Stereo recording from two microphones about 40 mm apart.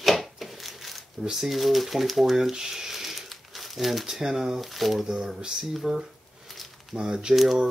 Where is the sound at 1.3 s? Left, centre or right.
Centre.